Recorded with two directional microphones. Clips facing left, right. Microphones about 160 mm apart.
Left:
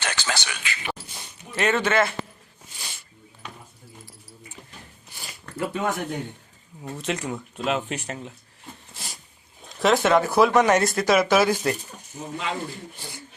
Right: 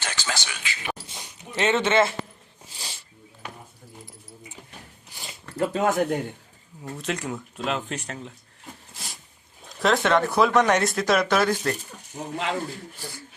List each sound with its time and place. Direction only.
0.0 s a sound: 65° left (ahead or behind)
1.0 s dog: 15° right (ahead or behind)
2.7 s a sound: 30° right (ahead or behind)
5.1 s zipper: 20° right (ahead or behind)
5.5 s speech: 40° right (ahead or behind)
6.9 s speech: centre (ahead or behind)
8.9 s a sound: centre (ahead or behind)
9.6 s speech: centre (ahead or behind)
12.2 s speech: 65° right (ahead or behind)